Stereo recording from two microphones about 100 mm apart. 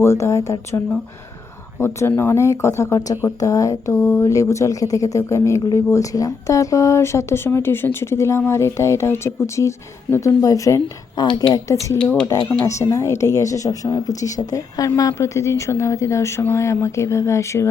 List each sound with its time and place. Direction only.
0.0 s speech: 30° left (ahead or behind)
1.8 s speech: 25° left (ahead or behind)
3.9 s speech: 20° left (ahead or behind)
4.3 s a woman's voice: 30° left (ahead or behind)
11.1 s speech: 45° left (ahead or behind)
11.5 s a woman's voice: 30° left (ahead or behind)